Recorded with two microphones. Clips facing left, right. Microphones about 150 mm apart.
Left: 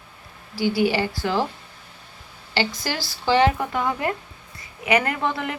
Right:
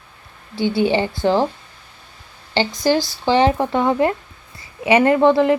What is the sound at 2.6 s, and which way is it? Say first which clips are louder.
Speech: right 8 dB; 20° right (ahead or behind).